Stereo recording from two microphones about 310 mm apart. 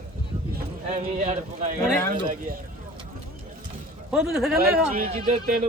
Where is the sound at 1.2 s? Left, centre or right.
Right.